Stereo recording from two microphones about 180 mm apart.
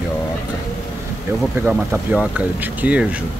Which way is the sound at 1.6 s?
10° right (ahead or behind).